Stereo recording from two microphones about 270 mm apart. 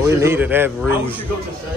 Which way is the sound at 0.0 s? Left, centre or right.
Centre.